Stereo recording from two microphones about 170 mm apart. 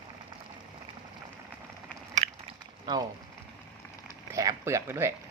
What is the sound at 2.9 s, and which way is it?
Speech, 25° right (ahead or behind).